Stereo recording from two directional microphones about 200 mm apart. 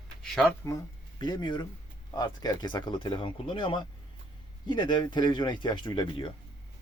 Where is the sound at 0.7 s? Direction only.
20° left (ahead or behind).